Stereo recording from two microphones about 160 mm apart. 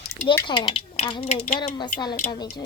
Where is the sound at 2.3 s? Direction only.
25° left (ahead or behind).